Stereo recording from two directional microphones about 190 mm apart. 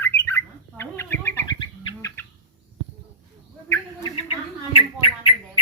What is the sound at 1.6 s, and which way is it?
Bird, 25° left (ahead or behind).